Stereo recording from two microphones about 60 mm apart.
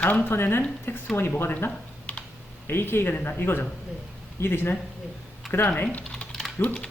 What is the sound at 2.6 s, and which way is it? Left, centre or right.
Speech, left.